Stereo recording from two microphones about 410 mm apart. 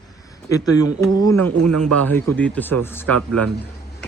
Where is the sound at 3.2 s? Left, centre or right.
Right.